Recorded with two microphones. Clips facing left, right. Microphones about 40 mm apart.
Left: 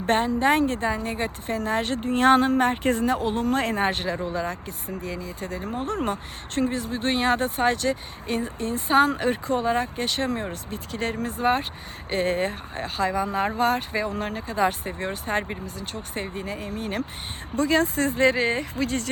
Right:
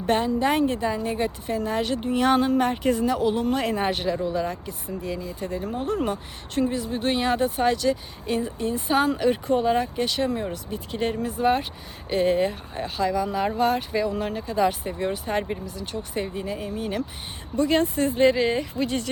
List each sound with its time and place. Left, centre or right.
0.0 s a woman's voice: left
16.6 s speech: left